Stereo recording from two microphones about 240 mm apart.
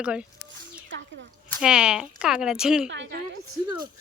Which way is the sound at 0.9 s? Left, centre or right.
Right.